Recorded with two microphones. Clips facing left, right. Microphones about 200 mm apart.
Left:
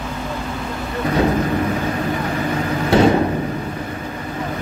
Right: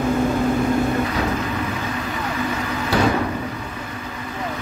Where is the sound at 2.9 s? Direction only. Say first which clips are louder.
Left 6 dB; 25° left (ahead or behind).